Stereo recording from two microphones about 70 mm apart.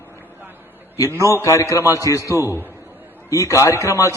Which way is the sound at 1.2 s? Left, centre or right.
Left.